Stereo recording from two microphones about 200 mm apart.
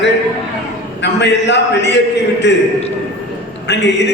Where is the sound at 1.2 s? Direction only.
60° left (ahead or behind).